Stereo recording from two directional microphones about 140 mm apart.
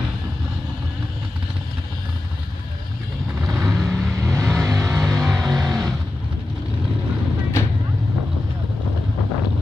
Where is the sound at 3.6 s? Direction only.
Centre (ahead or behind).